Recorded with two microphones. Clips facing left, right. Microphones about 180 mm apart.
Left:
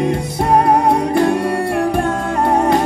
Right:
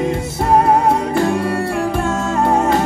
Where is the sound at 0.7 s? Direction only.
20° left (ahead or behind).